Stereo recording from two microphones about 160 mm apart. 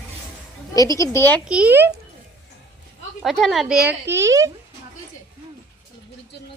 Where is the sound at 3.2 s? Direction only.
Centre (ahead or behind); by 4.5 s 20° right (ahead or behind).